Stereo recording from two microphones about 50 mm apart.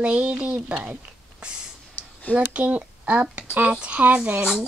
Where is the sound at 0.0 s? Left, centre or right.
Right.